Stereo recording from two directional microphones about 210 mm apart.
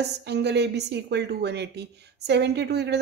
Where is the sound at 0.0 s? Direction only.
55° right (ahead or behind).